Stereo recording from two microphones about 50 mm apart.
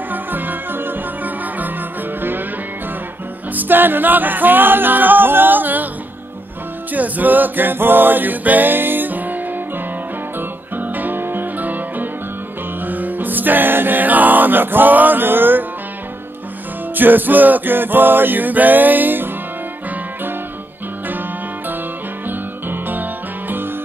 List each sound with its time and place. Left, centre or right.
0.1 s music: right
3.5 s music: right
6.9 s music: right
10.8 s music: right
16.9 s music: right
22.7 s music: right